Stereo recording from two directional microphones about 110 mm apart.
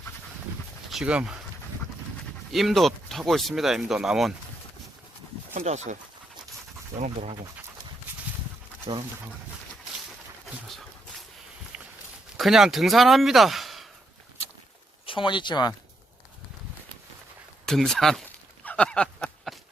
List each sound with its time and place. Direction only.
0.9 s speech: 5° right (ahead or behind)
2.5 s speech: centre (ahead or behind)
5.6 s speech: 90° right
10.4 s a sound: centre (ahead or behind)
11.7 s a sound: 10° right (ahead or behind)
12.4 s speech: 5° right (ahead or behind)
15.0 s speech: 50° left (ahead or behind)
17.7 s speech: 5° left (ahead or behind)
18.6 s a sound: 10° left (ahead or behind)